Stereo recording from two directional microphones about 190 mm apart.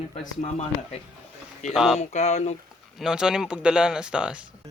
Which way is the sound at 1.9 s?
35° left (ahead or behind).